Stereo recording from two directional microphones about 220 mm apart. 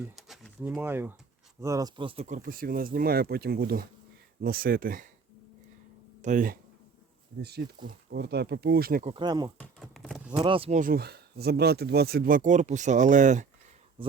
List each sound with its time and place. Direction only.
0.2 s a sound: centre (ahead or behind)
1.6 s speech: 15° right (ahead or behind); by 5.0 s 40° right (ahead or behind)
6.2 s speech: 35° right (ahead or behind)
7.9 s speech: 45° right (ahead or behind)
9.1 s speech: 20° right (ahead or behind)
9.6 s a sound: 5° left (ahead or behind)
10.3 s speech: 25° right (ahead or behind)